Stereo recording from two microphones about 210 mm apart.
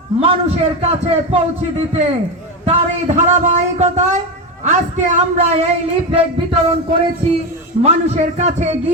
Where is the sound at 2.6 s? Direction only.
35° right (ahead or behind).